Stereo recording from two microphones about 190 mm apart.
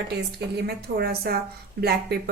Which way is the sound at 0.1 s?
60° right (ahead or behind).